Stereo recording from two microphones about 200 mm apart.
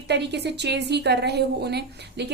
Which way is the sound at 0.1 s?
55° right (ahead or behind).